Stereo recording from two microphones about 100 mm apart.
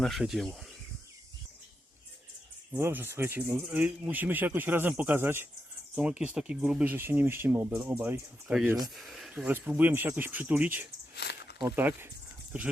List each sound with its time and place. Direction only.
0.0 s speech: centre (ahead or behind)
2.7 s speech: 20° right (ahead or behind)
6.0 s speech: 10° right (ahead or behind)
6.9 s speech: 20° right (ahead or behind)
9.0 s speech: centre (ahead or behind)
9.4 s speech: 20° right (ahead or behind)